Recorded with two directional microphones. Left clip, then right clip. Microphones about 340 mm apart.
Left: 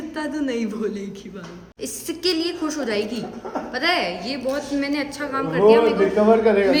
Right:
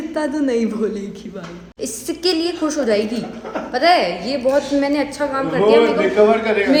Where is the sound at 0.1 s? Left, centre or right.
Centre.